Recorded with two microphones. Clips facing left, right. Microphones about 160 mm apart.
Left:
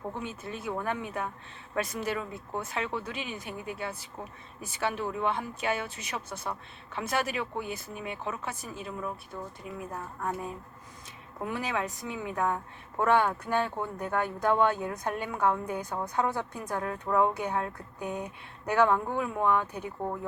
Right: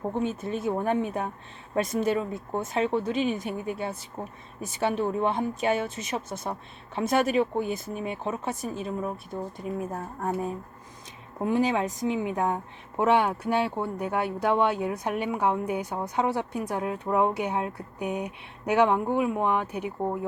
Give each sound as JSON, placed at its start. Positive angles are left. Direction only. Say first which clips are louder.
{"t": 0.7, "sound": "speech", "louder": "right 6 dB", "side_deg": -30}
{"t": 7.6, "sound": "speech", "louder": "right 7 dB", "side_deg": -40}
{"t": 11.3, "sound": "speech", "louder": "right 8 dB", "side_deg": -25}